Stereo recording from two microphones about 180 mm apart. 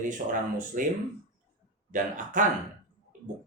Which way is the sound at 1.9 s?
45° right (ahead or behind).